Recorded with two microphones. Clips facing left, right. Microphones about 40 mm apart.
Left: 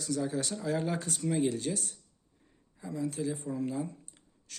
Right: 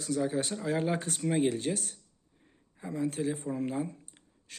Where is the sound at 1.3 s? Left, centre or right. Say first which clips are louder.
Right 2 dB; right.